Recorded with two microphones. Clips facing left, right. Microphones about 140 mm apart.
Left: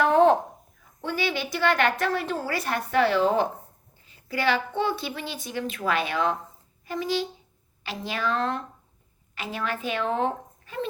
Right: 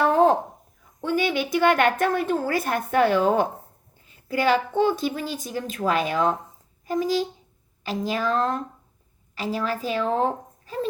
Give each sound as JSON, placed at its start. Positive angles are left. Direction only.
{"t": 1.0, "sound": "a woman's voice", "side_deg": -50}